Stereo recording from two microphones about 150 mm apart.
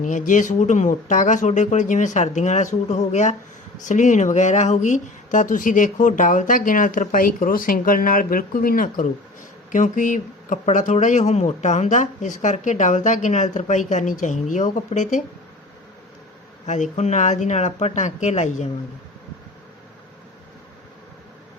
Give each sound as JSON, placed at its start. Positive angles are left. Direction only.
{"t": 0.0, "sound": "speech", "side_deg": 55}
{"t": 9.7, "sound": "speech", "side_deg": 60}
{"t": 16.6, "sound": "speech", "side_deg": 50}